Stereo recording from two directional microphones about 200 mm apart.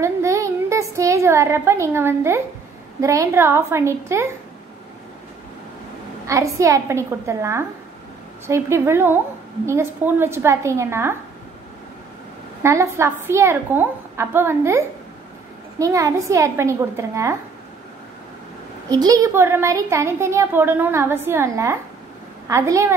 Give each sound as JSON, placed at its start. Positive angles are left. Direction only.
{"t": 0.0, "sound": "a sound", "side_deg": -15}
{"t": 3.0, "sound": "a child's voice", "side_deg": -15}
{"t": 6.2, "sound": "a child's voice", "side_deg": -15}
{"t": 12.6, "sound": "a child's voice", "side_deg": -15}
{"t": 18.9, "sound": "a child's voice", "side_deg": -20}